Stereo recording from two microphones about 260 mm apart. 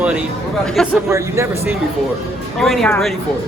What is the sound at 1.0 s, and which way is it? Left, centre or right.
Speech, centre.